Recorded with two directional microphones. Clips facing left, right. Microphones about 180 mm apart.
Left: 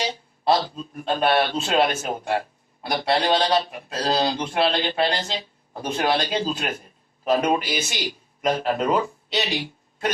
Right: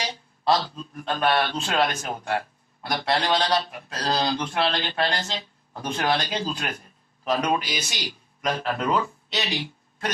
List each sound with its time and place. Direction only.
0.0 s a sound: 10° left (ahead or behind)
1.1 s speech: 15° left (ahead or behind)
7.6 s speech: 50° left (ahead or behind)
8.4 s speech: 20° left (ahead or behind)